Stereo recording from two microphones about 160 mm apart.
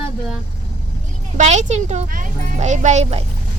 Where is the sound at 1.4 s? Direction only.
45° right (ahead or behind).